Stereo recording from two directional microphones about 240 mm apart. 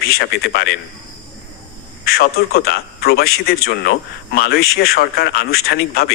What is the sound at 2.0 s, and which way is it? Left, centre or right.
A man's voice, left.